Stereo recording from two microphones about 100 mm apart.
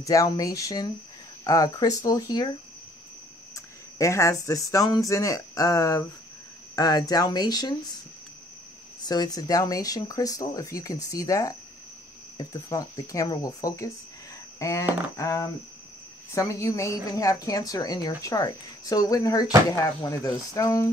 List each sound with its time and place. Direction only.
0.0 s a woman's voice: 35° left (ahead or behind)
3.5 s a woman's voice: 30° left (ahead or behind)
9.0 s a woman's voice: 40° left (ahead or behind)